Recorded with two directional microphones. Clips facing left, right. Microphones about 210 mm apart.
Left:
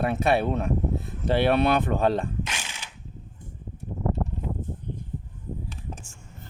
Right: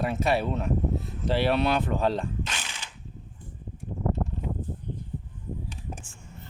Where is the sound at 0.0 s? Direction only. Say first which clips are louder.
Left 3 dB; 55° left (ahead or behind).